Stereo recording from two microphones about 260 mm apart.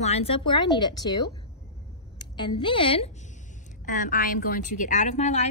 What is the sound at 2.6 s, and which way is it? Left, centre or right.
Speech, centre.